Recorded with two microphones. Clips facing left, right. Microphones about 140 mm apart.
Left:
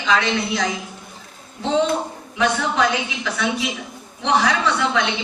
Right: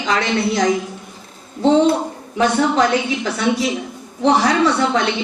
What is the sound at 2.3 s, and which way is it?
A woman's voice, 35° right (ahead or behind).